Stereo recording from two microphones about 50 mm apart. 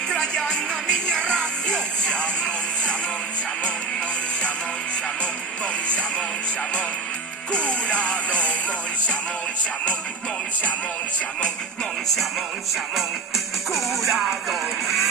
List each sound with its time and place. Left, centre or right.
0.1 s music: centre
5.2 s music: left
7.5 s music: left
12.7 s music: centre